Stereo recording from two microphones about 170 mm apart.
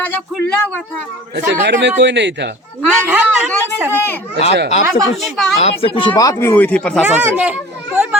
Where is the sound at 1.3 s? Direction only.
90° right.